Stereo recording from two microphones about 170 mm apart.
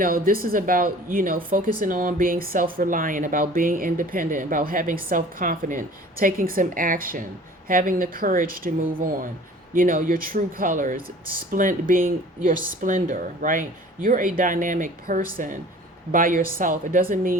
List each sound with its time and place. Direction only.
0.0 s speech: 60° right (ahead or behind)